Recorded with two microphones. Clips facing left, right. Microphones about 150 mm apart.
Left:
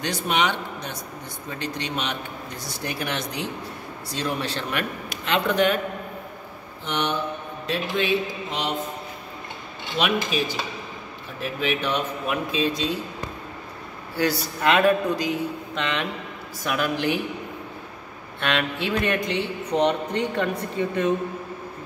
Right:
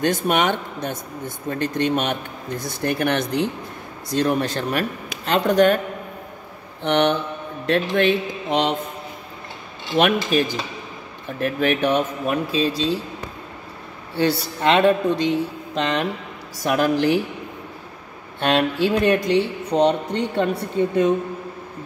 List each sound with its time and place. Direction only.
0.0 s speech: 50° right (ahead or behind)
6.8 s speech: 60° right (ahead or behind)
9.9 s speech: 55° right (ahead or behind)
12.4 s speech: 35° right (ahead or behind)
14.1 s a man's voice: 30° right (ahead or behind)
18.5 s speech: 35° right (ahead or behind)